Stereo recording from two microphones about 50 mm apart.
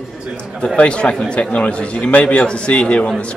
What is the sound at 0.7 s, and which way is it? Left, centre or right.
Speech, left.